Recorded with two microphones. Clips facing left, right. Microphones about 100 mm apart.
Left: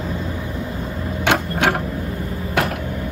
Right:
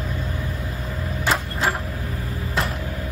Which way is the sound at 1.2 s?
75° left (ahead or behind).